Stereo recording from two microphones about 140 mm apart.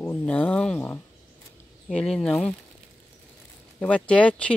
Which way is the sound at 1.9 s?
5° left (ahead or behind).